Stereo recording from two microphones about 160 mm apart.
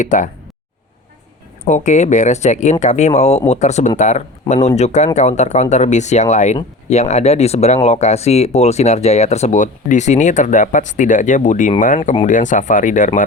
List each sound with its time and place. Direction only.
0.0 s speech: 50° left (ahead or behind)
1.6 s speech: 50° left (ahead or behind)